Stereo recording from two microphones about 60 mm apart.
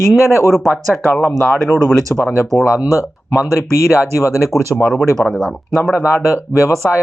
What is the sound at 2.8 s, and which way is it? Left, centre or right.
Speech, left.